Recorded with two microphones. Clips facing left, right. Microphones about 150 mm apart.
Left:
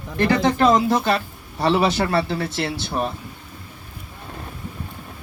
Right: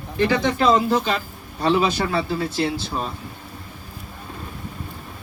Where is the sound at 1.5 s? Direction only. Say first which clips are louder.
Left 1 dB; 75° left (ahead or behind).